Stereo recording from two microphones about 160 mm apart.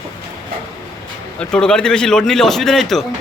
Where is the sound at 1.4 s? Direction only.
5° left (ahead or behind).